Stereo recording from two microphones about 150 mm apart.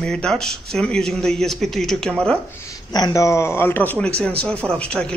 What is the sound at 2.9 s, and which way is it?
A woman's voice, 25° left (ahead or behind).